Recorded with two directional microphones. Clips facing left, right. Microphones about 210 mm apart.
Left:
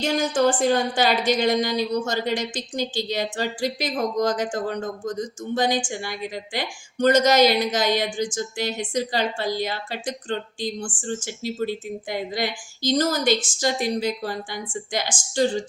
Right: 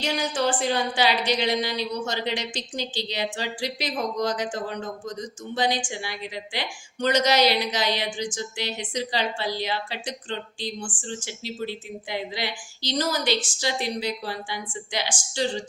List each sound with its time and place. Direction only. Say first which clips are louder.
0.0 s a woman's voice: left 5 dB; 45° left (ahead or behind)